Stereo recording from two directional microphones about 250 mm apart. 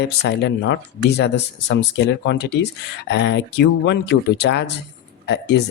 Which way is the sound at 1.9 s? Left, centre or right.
Left.